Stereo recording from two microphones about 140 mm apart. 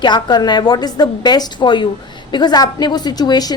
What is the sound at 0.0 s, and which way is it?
A woman's voice, 30° left (ahead or behind).